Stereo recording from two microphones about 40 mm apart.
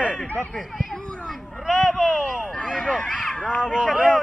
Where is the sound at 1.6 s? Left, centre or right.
Centre.